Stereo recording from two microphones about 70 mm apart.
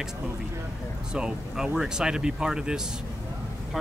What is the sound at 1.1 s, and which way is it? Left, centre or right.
Speech, centre.